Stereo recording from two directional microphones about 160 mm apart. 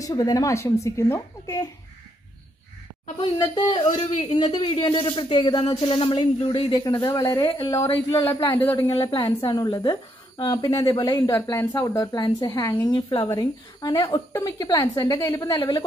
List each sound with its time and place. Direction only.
0.0 s a woman's voice: 20° left (ahead or behind)
3.2 s a woman's voice: 30° left (ahead or behind)
3.9 s a man's voice: 50° left (ahead or behind)
4.3 s a woman's voice: 25° left (ahead or behind)